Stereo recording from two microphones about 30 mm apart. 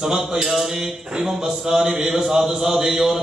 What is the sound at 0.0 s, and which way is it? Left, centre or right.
A man's voice, centre.